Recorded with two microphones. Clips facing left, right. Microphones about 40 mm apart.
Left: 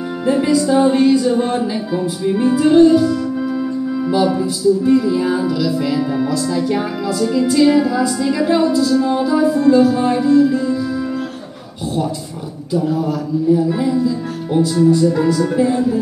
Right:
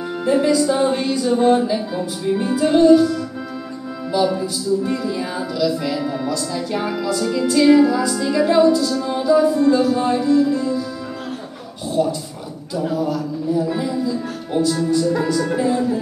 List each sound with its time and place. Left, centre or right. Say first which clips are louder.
0.2 s music: left 1 dB; centre
12.9 s music: left 3 dB; centre